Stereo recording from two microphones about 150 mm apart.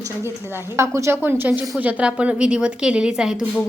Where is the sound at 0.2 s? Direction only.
20° right (ahead or behind).